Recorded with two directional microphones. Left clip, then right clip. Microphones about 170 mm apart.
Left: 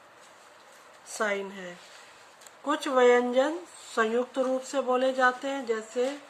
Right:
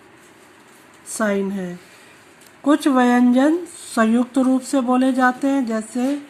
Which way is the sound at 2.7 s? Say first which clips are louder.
Right 5 dB; 60° right (ahead or behind).